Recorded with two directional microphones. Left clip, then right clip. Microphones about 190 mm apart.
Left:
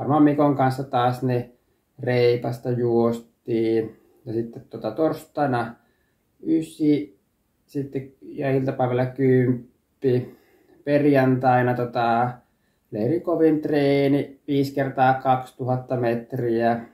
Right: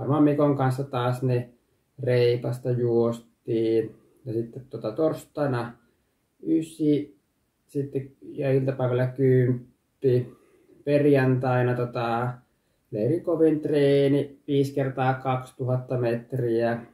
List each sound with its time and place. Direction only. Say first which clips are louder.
0.1 s speech: left 3 dB; 5° left (ahead or behind)